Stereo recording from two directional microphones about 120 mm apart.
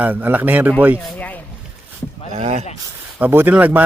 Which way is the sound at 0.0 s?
15° right (ahead or behind).